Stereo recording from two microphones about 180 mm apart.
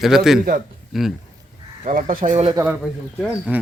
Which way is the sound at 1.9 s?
50° right (ahead or behind).